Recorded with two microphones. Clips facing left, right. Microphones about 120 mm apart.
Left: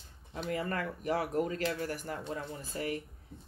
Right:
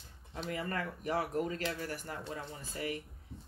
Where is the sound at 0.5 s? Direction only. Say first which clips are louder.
Left 3 dB; 40° left (ahead or behind).